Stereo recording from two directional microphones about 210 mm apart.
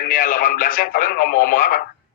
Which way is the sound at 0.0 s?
40° left (ahead or behind).